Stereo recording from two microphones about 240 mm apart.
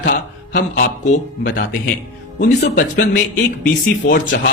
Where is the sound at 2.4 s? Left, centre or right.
Left.